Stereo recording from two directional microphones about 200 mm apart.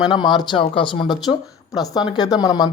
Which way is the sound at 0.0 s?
20° left (ahead or behind).